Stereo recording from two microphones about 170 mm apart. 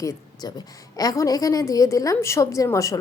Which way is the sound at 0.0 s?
20° left (ahead or behind).